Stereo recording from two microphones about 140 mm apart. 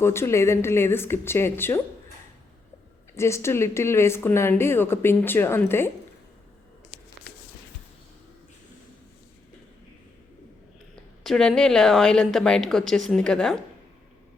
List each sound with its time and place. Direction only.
0.0 s speech: 20° left (ahead or behind)
3.2 s speech: 20° left (ahead or behind)
11.2 s a woman's voice: 5° left (ahead or behind)